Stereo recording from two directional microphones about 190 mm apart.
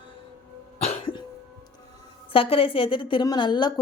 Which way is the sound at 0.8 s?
30° left (ahead or behind).